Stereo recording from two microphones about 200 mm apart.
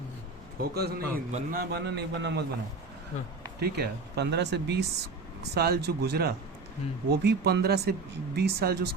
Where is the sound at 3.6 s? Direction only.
55° right (ahead or behind).